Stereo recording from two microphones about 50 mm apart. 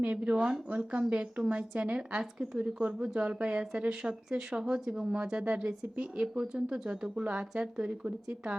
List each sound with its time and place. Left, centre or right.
0.0 s speech: right